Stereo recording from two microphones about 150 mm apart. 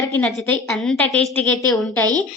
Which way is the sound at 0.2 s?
10° left (ahead or behind).